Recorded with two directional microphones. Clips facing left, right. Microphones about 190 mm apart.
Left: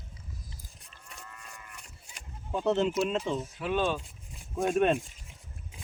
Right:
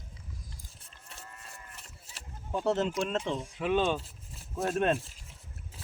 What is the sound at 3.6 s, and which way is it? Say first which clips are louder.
Speech: right 3 dB; 20° right (ahead or behind).